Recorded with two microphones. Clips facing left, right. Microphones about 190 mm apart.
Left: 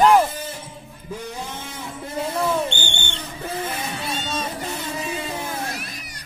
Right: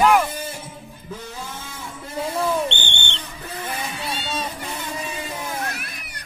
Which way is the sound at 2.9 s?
25° right (ahead or behind).